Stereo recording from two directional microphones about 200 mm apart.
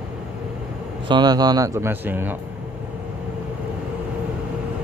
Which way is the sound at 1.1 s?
20° right (ahead or behind).